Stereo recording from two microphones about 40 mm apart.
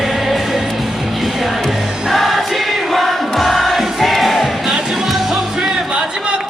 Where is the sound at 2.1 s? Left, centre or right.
Centre.